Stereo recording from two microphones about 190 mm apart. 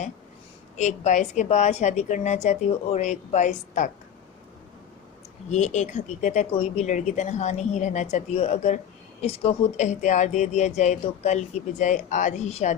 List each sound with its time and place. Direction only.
0.8 s speech: 40° left (ahead or behind)
5.5 s speech: 40° left (ahead or behind)